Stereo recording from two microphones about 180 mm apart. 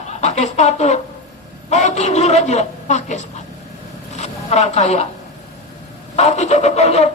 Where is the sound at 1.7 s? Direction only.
40° left (ahead or behind).